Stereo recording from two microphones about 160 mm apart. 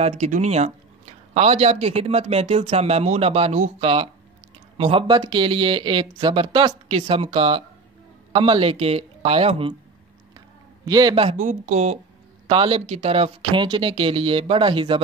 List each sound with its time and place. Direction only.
0.0 s speech: 45° right (ahead or behind)
10.9 s a man's voice: 25° right (ahead or behind)
11.1 s speech: 35° right (ahead or behind)
11.4 s speech: 45° right (ahead or behind)
12.4 s speech: 35° right (ahead or behind)